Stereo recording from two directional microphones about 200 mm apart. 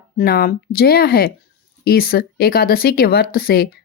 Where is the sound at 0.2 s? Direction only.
50° left (ahead or behind).